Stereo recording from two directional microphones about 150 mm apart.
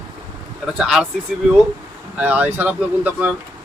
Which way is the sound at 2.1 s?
10° right (ahead or behind).